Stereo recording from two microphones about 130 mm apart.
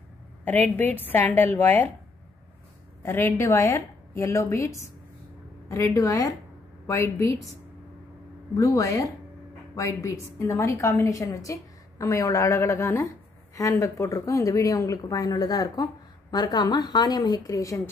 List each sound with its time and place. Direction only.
0.7 s a woman's voice: 15° left (ahead or behind)
3.0 s speech: 20° left (ahead or behind)
8.5 s speech: 25° left (ahead or behind)